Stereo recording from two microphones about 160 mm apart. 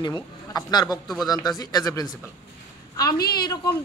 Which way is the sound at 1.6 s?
25° left (ahead or behind).